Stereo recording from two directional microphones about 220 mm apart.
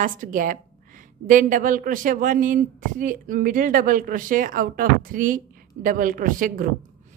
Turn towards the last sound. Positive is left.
turn(degrees=-40)  # may be behind; listen again after turning